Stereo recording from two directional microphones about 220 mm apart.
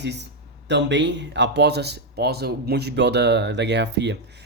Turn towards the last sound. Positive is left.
turn(degrees=-50)  # may be behind; listen again after turning